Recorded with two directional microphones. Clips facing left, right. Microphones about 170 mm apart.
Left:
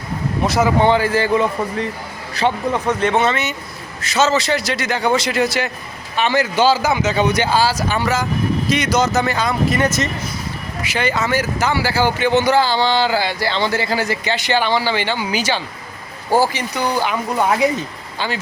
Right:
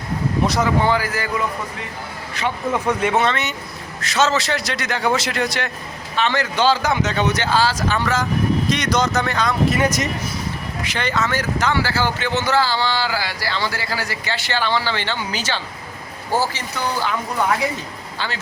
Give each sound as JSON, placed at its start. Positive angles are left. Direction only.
{"t": 0.4, "sound": "a man's voice", "side_deg": 0}
{"t": 0.8, "sound": "speech", "side_deg": 25}
{"t": 2.7, "sound": "a man's voice", "side_deg": -10}
{"t": 9.7, "sound": "speech", "side_deg": -10}
{"t": 10.8, "sound": "speech", "side_deg": 10}